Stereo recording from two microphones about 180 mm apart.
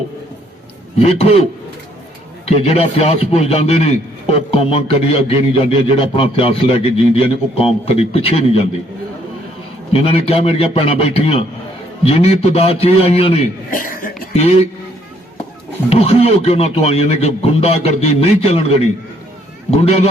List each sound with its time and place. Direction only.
0.9 s a man's voice: 35° left (ahead or behind)
2.6 s a man's voice: 35° left (ahead or behind)
9.9 s a man's voice: 30° left (ahead or behind)
13.7 s speech: 50° left (ahead or behind)
14.3 s a man's voice: 35° left (ahead or behind)
15.9 s a man's voice: 35° left (ahead or behind)